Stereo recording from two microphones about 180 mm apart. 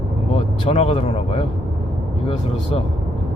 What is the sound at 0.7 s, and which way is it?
Speech, 35° left (ahead or behind).